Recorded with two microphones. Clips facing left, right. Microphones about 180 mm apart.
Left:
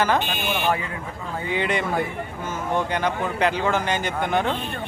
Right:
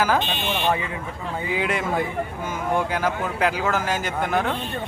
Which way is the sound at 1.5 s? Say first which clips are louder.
Left 1 dB; 5° right (ahead or behind).